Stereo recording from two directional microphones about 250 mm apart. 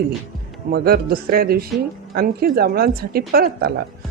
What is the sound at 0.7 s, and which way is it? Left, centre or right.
Speech, right.